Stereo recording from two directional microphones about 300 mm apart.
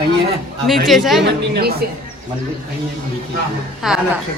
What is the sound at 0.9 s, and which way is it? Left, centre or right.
Speech, centre.